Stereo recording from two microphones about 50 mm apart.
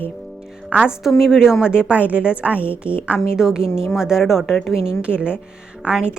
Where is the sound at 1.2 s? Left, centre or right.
Centre.